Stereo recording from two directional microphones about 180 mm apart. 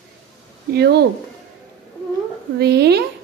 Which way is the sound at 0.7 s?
65° right (ahead or behind).